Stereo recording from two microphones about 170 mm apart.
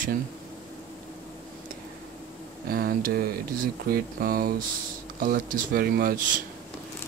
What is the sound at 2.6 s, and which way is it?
Speech, 60° right (ahead or behind).